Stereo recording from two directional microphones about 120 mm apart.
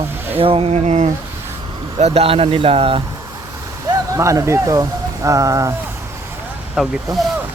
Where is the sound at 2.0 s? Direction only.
55° right (ahead or behind).